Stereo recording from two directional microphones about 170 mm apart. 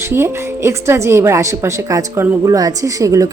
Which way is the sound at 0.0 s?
15° right (ahead or behind).